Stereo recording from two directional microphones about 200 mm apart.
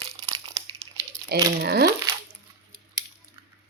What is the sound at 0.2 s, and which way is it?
Crumpling, 30° right (ahead or behind).